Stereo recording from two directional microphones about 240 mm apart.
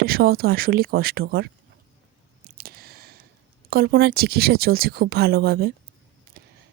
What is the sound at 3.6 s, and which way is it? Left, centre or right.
Speech, right.